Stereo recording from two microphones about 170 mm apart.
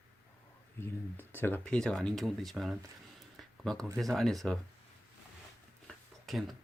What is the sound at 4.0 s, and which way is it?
Speech, centre (ahead or behind).